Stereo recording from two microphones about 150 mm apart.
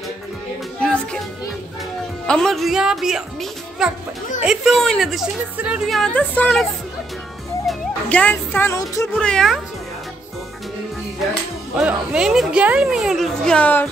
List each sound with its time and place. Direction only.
0.7 s music: 5° left (ahead or behind)
2.2 s speech: 5° left (ahead or behind)
7.6 s music: 5° left (ahead or behind)
8.7 s speech: 20° left (ahead or behind)
9.1 s speech: 5° left (ahead or behind)
11.7 s speech: 5° right (ahead or behind); by 13.8 s 10° left (ahead or behind)